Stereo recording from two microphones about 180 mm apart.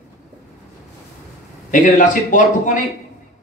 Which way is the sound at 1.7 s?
45° left (ahead or behind).